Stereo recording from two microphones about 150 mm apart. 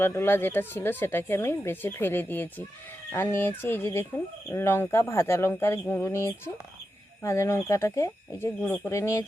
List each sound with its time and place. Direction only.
0.0 s speech: 15° left (ahead or behind)